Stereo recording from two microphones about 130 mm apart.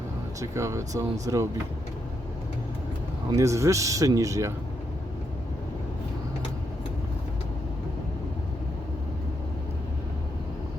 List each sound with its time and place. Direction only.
0.3 s speech: 25° right (ahead or behind)
3.3 s speech: 25° right (ahead or behind)